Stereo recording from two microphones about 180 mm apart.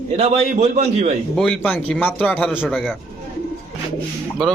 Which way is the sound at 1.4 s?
5° left (ahead or behind).